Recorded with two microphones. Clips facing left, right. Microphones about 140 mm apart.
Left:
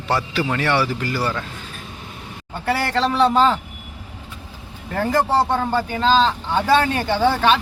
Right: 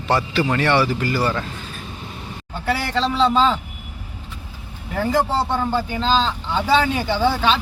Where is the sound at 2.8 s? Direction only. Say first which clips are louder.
Left 3 dB; 75° left (ahead or behind).